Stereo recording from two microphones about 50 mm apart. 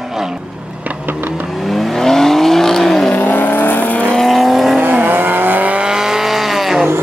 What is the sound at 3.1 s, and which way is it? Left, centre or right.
Vehicle, left.